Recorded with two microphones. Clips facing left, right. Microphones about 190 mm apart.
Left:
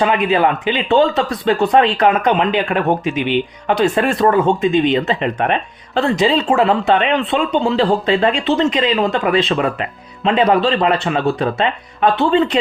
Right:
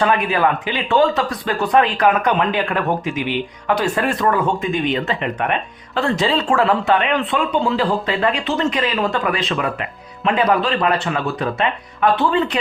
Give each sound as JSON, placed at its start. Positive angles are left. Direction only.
{"t": 0.0, "sound": "speech", "side_deg": 20}
{"t": 6.1, "sound": "speech", "side_deg": 20}